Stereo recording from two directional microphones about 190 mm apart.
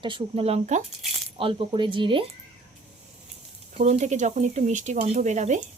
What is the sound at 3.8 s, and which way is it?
Speech, 35° right (ahead or behind).